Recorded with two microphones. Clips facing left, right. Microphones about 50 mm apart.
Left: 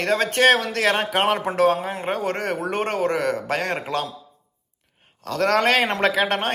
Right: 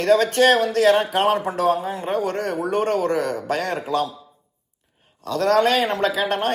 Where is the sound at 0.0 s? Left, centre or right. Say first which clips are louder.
Right 2 dB; left.